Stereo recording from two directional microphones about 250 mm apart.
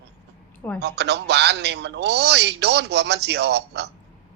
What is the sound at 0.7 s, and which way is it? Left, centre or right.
Speech, right.